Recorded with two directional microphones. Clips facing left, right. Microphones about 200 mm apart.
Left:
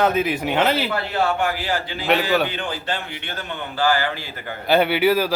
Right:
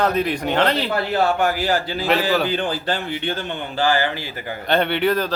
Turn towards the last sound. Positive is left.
turn(degrees=5)  # may be behind; listen again after turning